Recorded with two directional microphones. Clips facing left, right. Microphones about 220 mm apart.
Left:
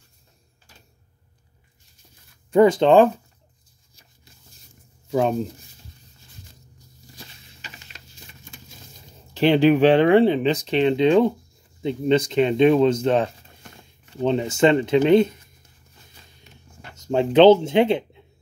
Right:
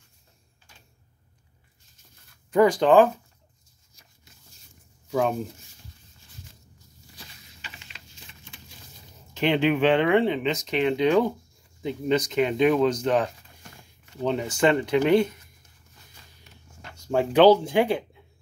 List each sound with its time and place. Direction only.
2.5 s speech: 25° left (ahead or behind)
9.3 s speech: 35° left (ahead or behind)
16.9 s speech: 20° left (ahead or behind)